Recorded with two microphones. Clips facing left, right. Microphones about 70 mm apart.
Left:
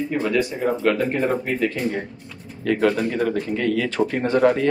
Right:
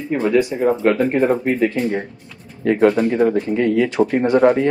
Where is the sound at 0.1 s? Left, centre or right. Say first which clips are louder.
Right 9 dB; right.